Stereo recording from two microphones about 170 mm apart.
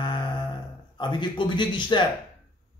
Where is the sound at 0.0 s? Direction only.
25° left (ahead or behind).